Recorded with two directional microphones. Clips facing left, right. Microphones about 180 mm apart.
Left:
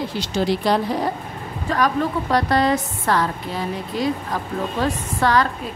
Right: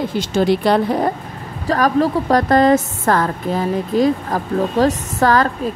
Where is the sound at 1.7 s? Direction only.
40° right (ahead or behind).